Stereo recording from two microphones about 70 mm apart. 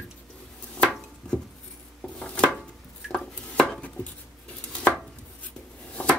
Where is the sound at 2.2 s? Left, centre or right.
Centre.